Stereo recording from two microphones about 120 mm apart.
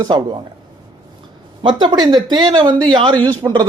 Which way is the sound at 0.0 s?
40° right (ahead or behind).